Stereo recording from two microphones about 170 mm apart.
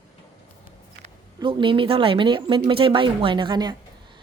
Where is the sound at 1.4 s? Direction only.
30° right (ahead or behind).